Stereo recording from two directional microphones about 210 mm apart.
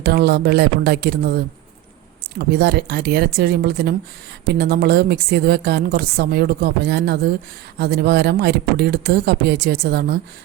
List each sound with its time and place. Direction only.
0.0 s a woman's voice: 50° right (ahead or behind)
2.4 s a woman's voice: 50° right (ahead or behind)